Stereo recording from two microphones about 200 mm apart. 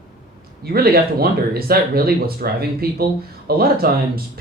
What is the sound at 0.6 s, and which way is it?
Speech, 50° right (ahead or behind).